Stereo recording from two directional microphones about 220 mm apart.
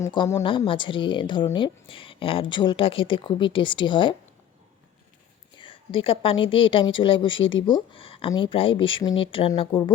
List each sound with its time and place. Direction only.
0.0 s a woman's voice: 15° left (ahead or behind)
5.5 s a woman's voice: 25° left (ahead or behind)